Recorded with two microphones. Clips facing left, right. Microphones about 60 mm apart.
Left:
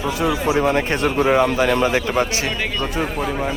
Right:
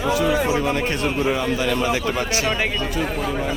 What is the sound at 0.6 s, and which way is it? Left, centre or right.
A man's voice, left.